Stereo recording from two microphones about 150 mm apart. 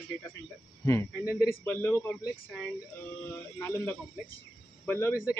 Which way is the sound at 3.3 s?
15° left (ahead or behind).